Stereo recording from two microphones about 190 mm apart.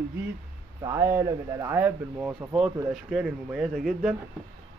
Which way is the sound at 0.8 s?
15° right (ahead or behind).